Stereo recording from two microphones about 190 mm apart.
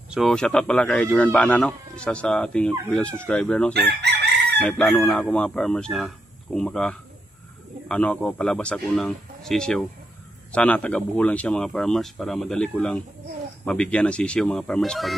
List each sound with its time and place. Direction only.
0.1 s speech: centre (ahead or behind)
4.0 s chicken: 60° right (ahead or behind)
4.6 s speech: 5° left (ahead or behind)